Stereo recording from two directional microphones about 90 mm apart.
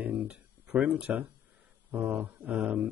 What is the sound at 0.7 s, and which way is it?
Speech, 15° right (ahead or behind).